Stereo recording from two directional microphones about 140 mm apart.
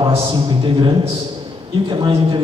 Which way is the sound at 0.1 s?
35° right (ahead or behind).